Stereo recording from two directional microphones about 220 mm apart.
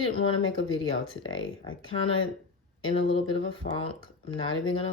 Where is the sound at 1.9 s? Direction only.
25° left (ahead or behind).